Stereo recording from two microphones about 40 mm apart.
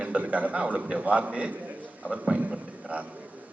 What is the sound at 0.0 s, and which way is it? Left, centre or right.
A man's voice, right.